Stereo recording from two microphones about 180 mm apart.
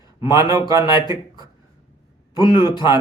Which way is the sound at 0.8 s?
25° left (ahead or behind).